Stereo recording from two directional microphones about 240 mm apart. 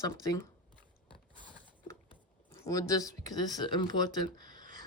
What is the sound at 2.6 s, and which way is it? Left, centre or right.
Speech, centre.